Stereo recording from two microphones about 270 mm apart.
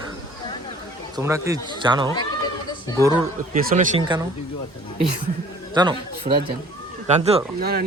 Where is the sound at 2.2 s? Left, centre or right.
Centre.